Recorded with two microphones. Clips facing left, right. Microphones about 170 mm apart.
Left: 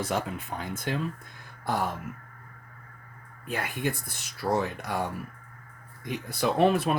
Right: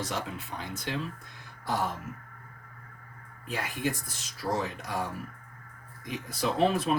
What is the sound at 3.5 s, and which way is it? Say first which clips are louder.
Speech: left 1 dB; 60° left (ahead or behind).